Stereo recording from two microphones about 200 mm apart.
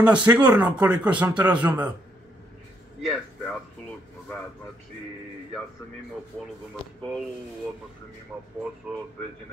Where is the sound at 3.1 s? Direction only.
Centre (ahead or behind).